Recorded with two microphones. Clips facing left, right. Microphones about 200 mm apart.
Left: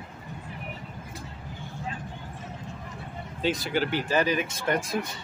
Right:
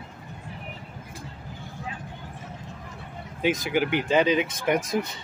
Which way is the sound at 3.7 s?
15° right (ahead or behind).